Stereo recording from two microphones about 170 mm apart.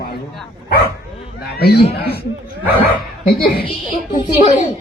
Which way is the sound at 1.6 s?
65° left (ahead or behind).